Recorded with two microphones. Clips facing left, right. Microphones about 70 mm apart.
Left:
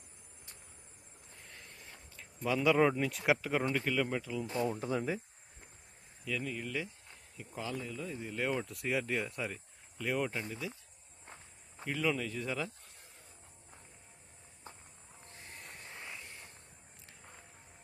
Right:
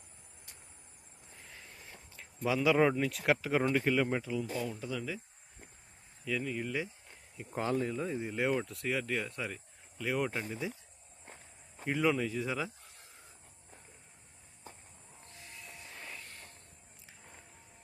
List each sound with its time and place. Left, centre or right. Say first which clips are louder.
1.4 s a sound: right 1 dB; centre
3.0 s speech: right 1 dB; centre
4.7 s speech: left 4 dB; left
6.2 s speech: right 3 dB; centre
7.5 s speech: right 7 dB; right
8.3 s speech: right 2 dB; centre
8.6 s speech: even; centre
10.3 s speech: right 2 dB; centre
11.9 s speech: right 4 dB; centre
15.3 s a sound: left 1 dB; left
15.5 s vehicle: even; left
16.0 s a sound: right 1 dB; centre